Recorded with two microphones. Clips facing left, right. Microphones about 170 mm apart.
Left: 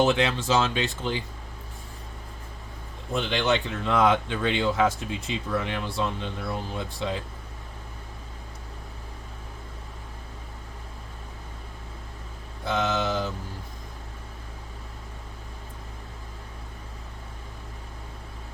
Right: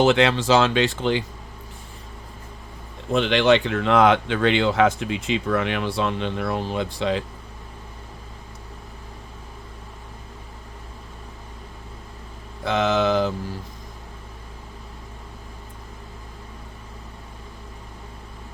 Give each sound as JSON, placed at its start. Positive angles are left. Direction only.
{"t": 0.0, "sound": "speech", "side_deg": -80}
{"t": 3.1, "sound": "speech", "side_deg": -85}
{"t": 12.6, "sound": "speech", "side_deg": -75}